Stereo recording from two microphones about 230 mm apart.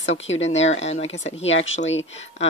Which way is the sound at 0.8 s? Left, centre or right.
Left.